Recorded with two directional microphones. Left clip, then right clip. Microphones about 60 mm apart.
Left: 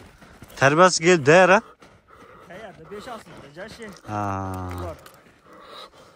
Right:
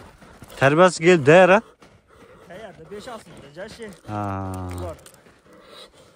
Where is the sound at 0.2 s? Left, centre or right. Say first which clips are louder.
Right 1 dB; centre.